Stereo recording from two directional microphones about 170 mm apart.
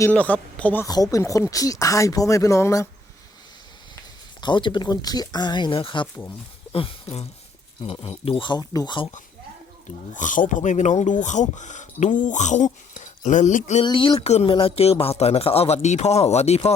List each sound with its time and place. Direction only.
0.0 s speech: 10° left (ahead or behind)
0.9 s speech: 20° left (ahead or behind)
4.4 s speech: 25° left (ahead or behind)
10.1 s speech: 50° left (ahead or behind)
13.8 s speech: 25° left (ahead or behind)